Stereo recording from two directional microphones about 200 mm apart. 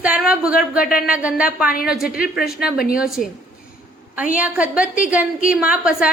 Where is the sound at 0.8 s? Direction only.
45° left (ahead or behind).